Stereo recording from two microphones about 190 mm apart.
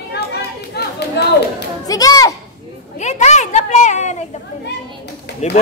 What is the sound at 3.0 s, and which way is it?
Children playing, 40° left (ahead or behind).